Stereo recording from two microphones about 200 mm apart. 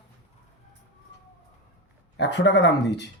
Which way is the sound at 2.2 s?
60° left (ahead or behind).